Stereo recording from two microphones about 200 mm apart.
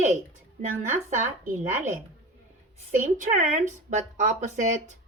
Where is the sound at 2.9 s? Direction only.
35° right (ahead or behind).